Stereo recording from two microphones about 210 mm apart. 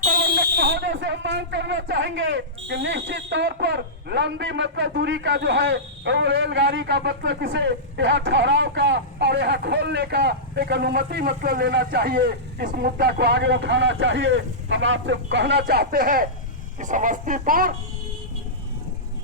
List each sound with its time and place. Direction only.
0.0 s speech: 45° right (ahead or behind)